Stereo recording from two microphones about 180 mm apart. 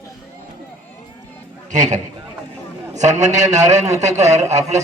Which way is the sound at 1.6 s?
45° right (ahead or behind).